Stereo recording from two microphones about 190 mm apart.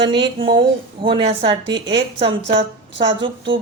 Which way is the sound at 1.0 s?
30° right (ahead or behind).